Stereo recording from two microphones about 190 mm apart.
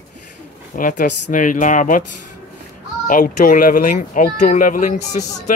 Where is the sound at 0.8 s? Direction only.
45° left (ahead or behind).